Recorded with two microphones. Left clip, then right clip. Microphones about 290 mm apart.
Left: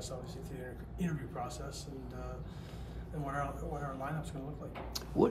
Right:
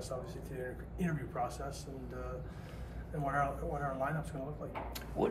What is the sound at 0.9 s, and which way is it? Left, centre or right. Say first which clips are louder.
Speech: right 3 dB; centre.